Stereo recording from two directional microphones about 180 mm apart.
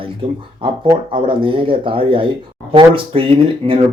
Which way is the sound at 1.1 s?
30° right (ahead or behind).